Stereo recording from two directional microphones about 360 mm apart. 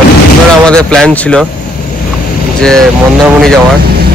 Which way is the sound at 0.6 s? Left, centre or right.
Centre.